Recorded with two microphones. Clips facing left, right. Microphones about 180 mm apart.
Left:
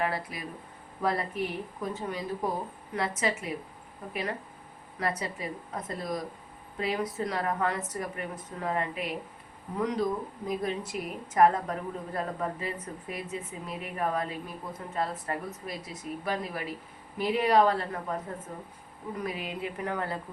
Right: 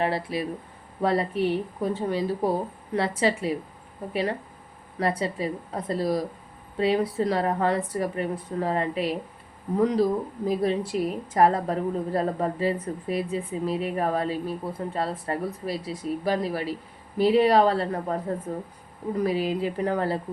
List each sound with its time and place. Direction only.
0.0 s a woman's voice: 30° right (ahead or behind)